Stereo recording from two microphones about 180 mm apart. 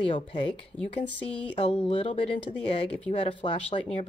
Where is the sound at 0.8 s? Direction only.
5° left (ahead or behind).